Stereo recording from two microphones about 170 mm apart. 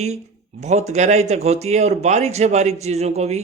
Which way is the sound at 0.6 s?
40° right (ahead or behind).